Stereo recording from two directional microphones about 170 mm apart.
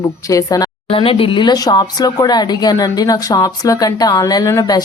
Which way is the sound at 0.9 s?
30° left (ahead or behind).